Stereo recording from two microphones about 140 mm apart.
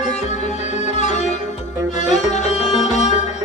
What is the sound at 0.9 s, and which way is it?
Music, 55° left (ahead or behind).